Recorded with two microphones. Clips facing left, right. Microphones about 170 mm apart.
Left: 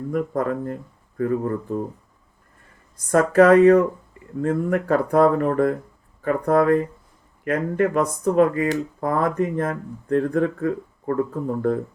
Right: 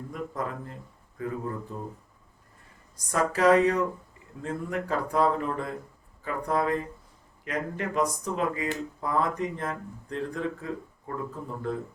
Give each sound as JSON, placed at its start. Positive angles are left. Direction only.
{"t": 0.1, "sound": "speech", "side_deg": 55}
{"t": 3.1, "sound": "speech", "side_deg": 55}